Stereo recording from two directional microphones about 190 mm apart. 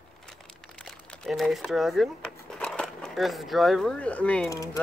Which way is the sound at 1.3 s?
Centre (ahead or behind).